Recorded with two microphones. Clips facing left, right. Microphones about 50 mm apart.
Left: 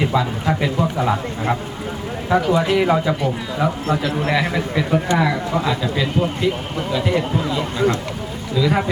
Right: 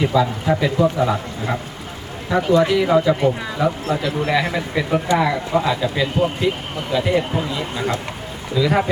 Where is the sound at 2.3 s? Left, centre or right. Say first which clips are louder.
Right 1 dB; centre.